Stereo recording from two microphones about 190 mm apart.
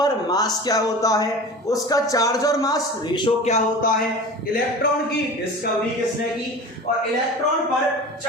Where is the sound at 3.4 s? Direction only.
35° left (ahead or behind).